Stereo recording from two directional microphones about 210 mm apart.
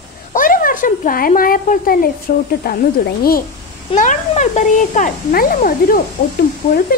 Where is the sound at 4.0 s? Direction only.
35° left (ahead or behind).